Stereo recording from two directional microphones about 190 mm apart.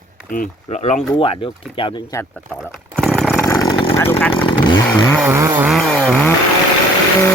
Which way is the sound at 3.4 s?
15° left (ahead or behind).